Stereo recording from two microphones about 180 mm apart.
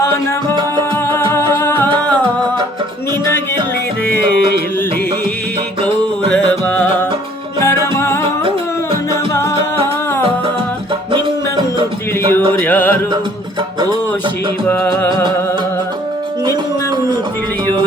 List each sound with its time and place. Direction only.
1.1 s music: 15° left (ahead or behind)
6.7 s music: 10° left (ahead or behind)
12.6 s music: 10° left (ahead or behind)
14.7 s music: 15° left (ahead or behind)